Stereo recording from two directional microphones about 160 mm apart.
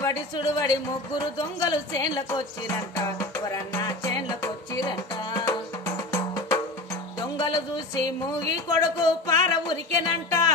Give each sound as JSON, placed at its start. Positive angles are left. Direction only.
{"t": 0.0, "sound": "speech", "side_deg": 20}
{"t": 1.6, "sound": "music", "side_deg": 25}
{"t": 8.6, "sound": "speech", "side_deg": 25}